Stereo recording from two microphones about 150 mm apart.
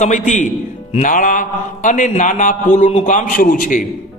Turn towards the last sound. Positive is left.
turn(degrees=60)  # may be behind; listen again after turning